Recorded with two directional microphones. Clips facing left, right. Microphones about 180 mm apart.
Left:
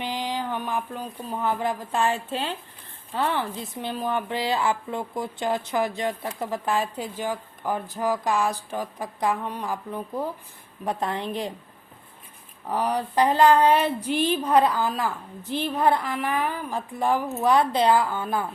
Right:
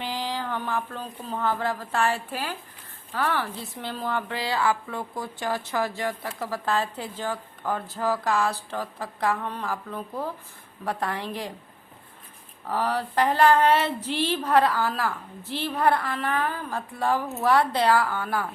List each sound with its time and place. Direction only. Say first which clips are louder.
0.0 s a woman's voice: left 2 dB; 20° left (ahead or behind)
12.6 s a woman's voice: left 1 dB; 15° left (ahead or behind)